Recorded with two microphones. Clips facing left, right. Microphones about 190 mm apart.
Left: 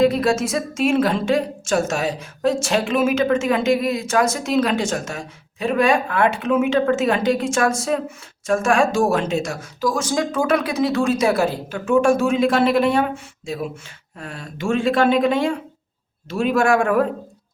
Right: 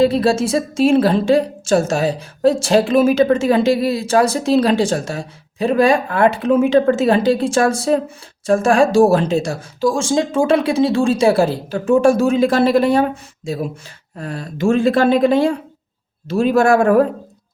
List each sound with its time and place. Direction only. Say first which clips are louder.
0.0 s a woman's voice: right 3 dB; 30° right (ahead or behind)